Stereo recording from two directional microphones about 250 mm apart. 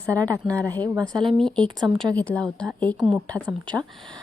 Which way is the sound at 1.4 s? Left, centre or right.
Centre.